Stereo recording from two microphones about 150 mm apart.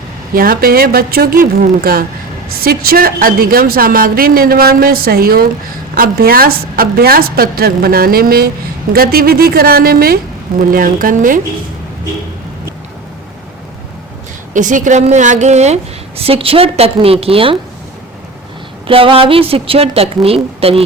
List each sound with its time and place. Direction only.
0.3 s a woman's voice: 75° right (ahead or behind)
10.6 s a woman's voice: 65° right (ahead or behind)
14.5 s a woman's voice: 60° right (ahead or behind); by 17.6 s 40° right (ahead or behind)
18.9 s a woman's voice: 35° right (ahead or behind)